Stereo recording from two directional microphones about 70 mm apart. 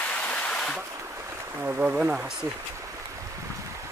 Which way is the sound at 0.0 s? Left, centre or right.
Centre.